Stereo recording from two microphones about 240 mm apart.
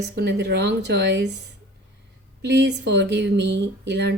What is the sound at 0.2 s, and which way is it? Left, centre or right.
Speech, right.